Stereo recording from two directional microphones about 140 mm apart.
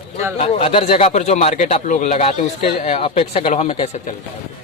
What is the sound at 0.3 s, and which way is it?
Speech, 45° left (ahead or behind).